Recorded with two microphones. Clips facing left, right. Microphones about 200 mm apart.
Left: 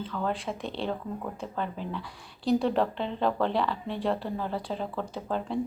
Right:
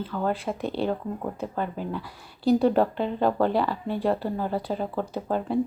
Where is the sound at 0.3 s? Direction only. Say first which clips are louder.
Right 6 dB; 5° right (ahead or behind).